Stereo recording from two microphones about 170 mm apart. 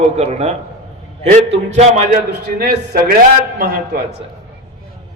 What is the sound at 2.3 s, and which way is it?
Speech, 70° right (ahead or behind).